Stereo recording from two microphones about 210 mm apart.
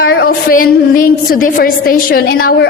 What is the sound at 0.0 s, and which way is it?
A woman's voice, 45° left (ahead or behind).